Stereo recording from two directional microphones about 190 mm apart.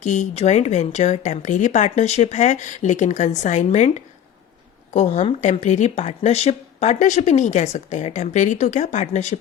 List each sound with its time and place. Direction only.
0.0 s speech: 40° left (ahead or behind)